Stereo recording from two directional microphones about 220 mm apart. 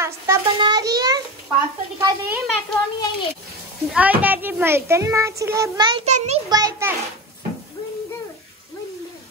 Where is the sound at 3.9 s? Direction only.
5° right (ahead or behind); by 6.4 s 30° right (ahead or behind).